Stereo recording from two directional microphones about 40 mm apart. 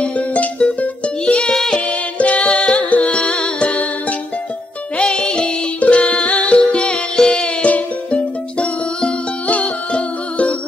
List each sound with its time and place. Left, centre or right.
0.0 s music: left
1.2 s music: left
4.9 s music: left
5.8 s music: left; by 7.5 s centre
7.6 s music: left